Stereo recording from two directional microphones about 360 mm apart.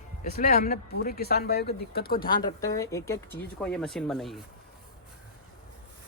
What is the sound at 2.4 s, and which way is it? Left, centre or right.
A man's voice, centre.